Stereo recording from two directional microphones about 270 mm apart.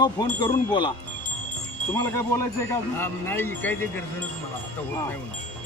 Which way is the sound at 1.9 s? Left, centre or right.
Centre.